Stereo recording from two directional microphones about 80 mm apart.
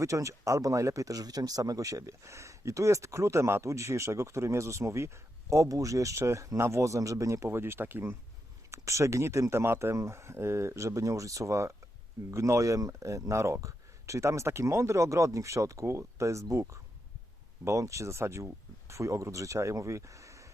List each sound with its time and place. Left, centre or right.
0.0 s speech: right
8.7 s speech: right